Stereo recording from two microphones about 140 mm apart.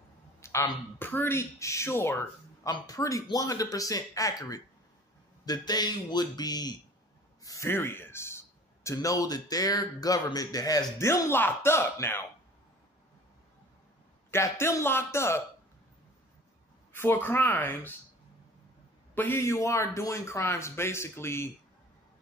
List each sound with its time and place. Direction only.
0.4 s a sound: 20° left (ahead or behind)
0.9 s speech: 15° left (ahead or behind)
14.3 s speech: 20° left (ahead or behind)
16.9 s speech: 15° left (ahead or behind)
19.1 s speech: 15° left (ahead or behind)